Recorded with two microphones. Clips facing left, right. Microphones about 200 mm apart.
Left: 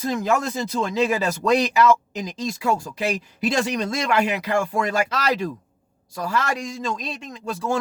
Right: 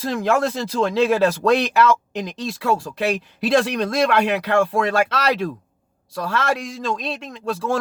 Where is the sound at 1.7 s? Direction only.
60° right (ahead or behind).